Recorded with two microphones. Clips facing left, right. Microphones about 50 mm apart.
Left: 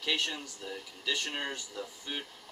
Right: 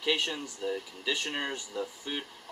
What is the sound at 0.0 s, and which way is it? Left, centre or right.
Speech, centre.